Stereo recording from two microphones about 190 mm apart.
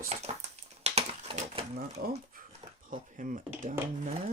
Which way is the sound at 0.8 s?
35° right (ahead or behind).